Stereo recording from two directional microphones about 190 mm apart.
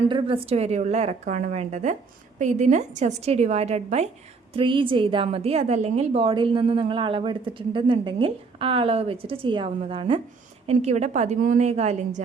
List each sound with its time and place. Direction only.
0.1 s a woman's voice: 30° right (ahead or behind)